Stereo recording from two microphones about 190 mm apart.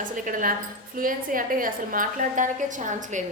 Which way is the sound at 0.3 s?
45° right (ahead or behind).